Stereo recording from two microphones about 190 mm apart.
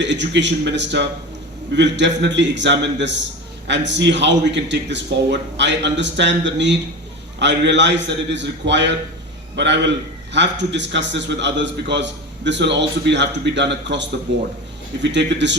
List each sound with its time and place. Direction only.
0.0 s a man's voice: 70° right (ahead or behind)